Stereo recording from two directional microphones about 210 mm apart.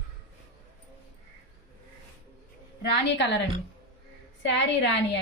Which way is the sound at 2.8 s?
55° left (ahead or behind).